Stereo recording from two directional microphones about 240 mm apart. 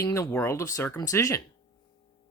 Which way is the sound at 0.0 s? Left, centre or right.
Centre.